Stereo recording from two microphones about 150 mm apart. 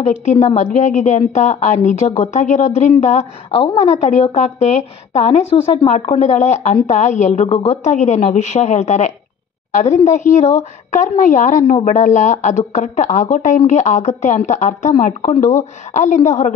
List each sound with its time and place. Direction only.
0.0 s a woman's voice: 45° left (ahead or behind)